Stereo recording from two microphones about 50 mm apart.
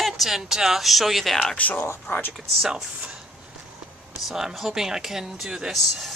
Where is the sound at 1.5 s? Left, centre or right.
Left.